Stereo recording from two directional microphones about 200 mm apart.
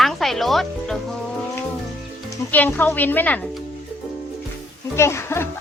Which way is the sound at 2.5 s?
10° left (ahead or behind).